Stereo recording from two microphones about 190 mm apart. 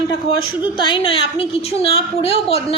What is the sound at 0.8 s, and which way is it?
A woman's voice, 25° left (ahead or behind).